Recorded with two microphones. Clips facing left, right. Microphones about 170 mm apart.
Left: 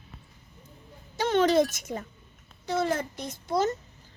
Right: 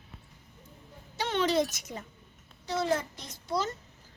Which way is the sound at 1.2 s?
45° left (ahead or behind).